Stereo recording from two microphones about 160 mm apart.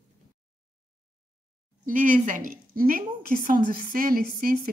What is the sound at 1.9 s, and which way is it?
A woman's voice, 55° right (ahead or behind).